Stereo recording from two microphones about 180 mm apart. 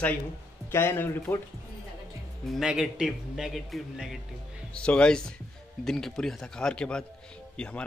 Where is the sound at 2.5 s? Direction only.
5° right (ahead or behind).